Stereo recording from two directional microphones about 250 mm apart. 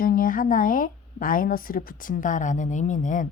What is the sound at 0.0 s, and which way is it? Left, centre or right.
A woman's voice, left.